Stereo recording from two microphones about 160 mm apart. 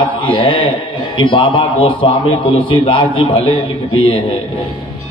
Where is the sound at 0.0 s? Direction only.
30° left (ahead or behind).